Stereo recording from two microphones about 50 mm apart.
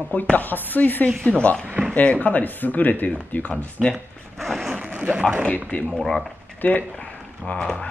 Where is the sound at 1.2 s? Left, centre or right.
Left.